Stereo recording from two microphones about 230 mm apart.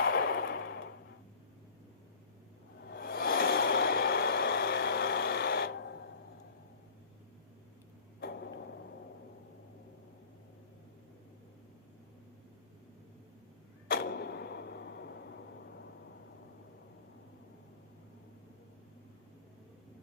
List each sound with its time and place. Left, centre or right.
0.0 s a sound: left
2.9 s vehicle: left
13.9 s vehicle: left